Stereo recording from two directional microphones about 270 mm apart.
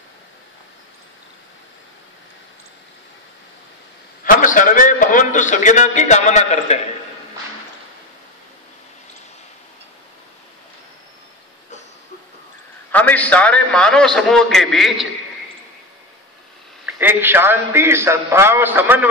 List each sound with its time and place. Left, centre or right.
4.2 s a man's voice: left
12.9 s a man's voice: centre
17.0 s a man's voice: centre